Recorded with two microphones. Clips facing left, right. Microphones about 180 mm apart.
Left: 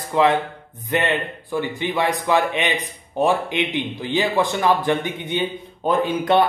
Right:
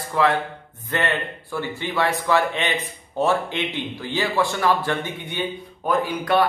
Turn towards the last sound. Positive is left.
turn(degrees=25)  # may be behind; listen again after turning